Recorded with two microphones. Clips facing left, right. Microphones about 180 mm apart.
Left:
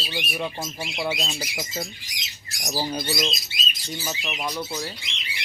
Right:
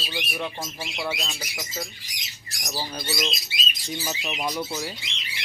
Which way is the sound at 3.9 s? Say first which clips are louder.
Right 1 dB; centre (ahead or behind).